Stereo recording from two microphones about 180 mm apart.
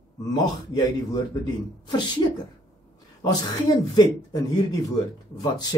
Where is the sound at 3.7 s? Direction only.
20° left (ahead or behind).